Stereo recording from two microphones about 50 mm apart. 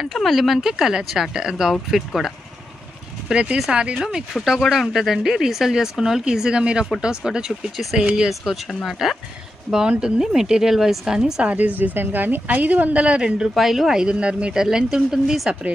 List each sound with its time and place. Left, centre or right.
0.0 s speech: centre
3.3 s speech: centre
4.3 s speech: centre
7.7 s speech: centre
9.8 s speech: centre
11.4 s speech: right
13.6 s speech: centre